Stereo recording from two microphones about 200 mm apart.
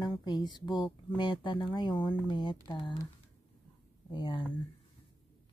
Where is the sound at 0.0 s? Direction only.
20° left (ahead or behind).